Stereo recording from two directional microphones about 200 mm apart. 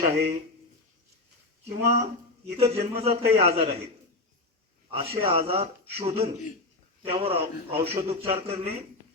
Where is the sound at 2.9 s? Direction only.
30° right (ahead or behind).